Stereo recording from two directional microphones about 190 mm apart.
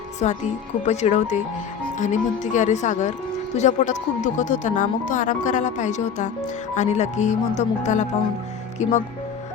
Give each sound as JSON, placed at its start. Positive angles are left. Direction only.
{"t": 0.2, "sound": "speech", "side_deg": 35}